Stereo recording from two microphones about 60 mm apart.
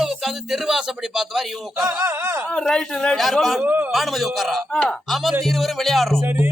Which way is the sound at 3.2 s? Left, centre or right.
Centre.